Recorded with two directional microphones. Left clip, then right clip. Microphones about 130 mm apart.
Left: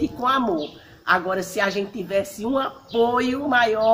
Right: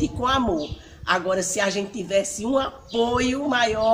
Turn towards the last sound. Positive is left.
turn(degrees=-30)  # may be behind; listen again after turning